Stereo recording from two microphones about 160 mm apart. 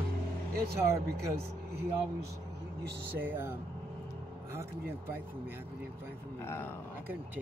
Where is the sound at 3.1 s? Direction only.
10° right (ahead or behind).